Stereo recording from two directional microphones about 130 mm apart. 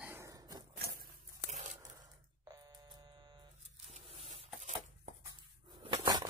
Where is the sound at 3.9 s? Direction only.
60° right (ahead or behind).